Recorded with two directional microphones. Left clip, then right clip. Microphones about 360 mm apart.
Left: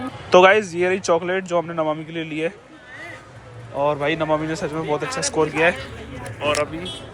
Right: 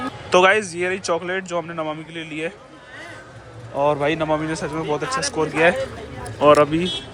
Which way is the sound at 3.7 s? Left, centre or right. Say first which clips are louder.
Right 1 dB; centre.